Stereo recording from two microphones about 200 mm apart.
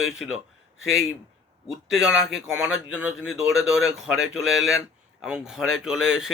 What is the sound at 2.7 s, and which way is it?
Speech, 90° left.